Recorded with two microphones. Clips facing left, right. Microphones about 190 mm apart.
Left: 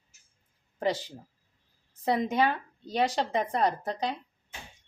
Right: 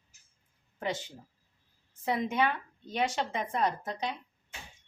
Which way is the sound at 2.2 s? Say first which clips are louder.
Left 3 dB; 35° left (ahead or behind).